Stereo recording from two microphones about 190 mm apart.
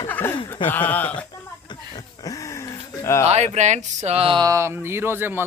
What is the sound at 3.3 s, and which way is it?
Speech, 35° right (ahead or behind).